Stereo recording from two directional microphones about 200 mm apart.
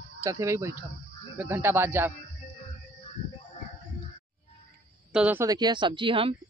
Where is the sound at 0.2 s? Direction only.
15° right (ahead or behind).